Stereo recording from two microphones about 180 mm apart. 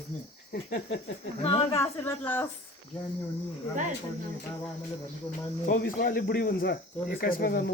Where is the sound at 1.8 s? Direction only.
10° left (ahead or behind).